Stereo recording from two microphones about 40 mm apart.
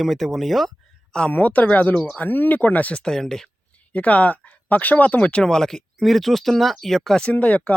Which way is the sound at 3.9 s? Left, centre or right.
Left.